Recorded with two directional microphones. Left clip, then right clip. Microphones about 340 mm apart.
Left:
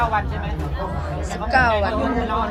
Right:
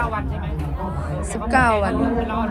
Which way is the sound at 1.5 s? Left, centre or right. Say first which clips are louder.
Even; right.